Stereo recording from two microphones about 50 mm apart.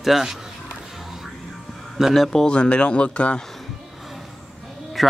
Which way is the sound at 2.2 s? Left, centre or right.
Centre.